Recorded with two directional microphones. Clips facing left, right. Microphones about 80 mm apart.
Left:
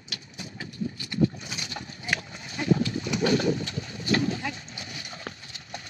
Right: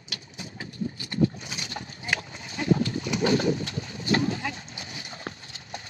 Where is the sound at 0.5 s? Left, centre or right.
Right.